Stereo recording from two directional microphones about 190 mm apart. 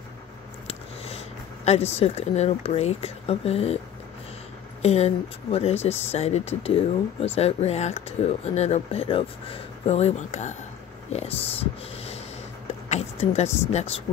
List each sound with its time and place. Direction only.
0.7 s speech: 30° left (ahead or behind)
4.8 s speech: 35° left (ahead or behind)
12.6 s vehicle: 35° left (ahead or behind)
13.7 s speech: 35° left (ahead or behind)